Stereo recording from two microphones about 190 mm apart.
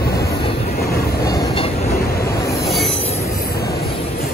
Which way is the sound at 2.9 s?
30° left (ahead or behind).